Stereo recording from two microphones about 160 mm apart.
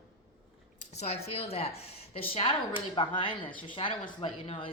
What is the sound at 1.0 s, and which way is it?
Speech, 40° left (ahead or behind).